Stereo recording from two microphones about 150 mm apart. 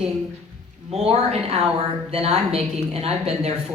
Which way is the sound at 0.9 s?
45° right (ahead or behind).